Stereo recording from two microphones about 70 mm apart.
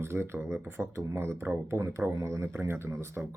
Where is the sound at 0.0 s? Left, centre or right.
Right.